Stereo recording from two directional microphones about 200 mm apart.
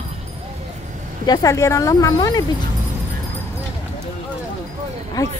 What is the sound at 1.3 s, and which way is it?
Speech, 15° left (ahead or behind).